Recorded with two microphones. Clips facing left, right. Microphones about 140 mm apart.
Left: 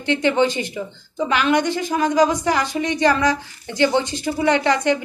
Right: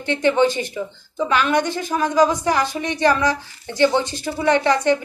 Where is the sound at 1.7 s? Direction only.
15° left (ahead or behind).